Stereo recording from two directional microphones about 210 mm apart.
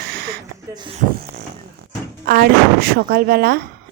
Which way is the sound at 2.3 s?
45° right (ahead or behind).